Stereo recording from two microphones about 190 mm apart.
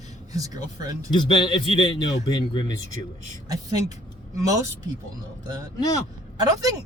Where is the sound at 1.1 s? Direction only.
25° left (ahead or behind).